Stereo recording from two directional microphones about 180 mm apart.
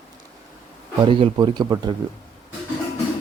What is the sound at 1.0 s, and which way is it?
Speech, 30° right (ahead or behind).